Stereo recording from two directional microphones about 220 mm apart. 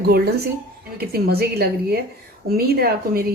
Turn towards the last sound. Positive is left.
turn(degrees=-45)  # may be behind; listen again after turning